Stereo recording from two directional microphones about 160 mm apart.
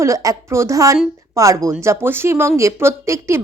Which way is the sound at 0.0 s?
20° right (ahead or behind).